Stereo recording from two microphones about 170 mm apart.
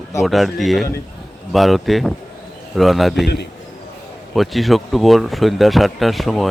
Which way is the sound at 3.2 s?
80° left.